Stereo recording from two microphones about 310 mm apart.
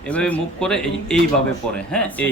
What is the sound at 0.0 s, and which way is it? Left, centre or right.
A woman's voice, centre.